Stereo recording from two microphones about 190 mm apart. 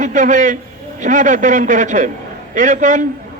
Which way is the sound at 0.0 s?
40° right (ahead or behind).